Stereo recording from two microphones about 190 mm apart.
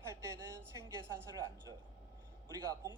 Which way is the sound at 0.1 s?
15° right (ahead or behind).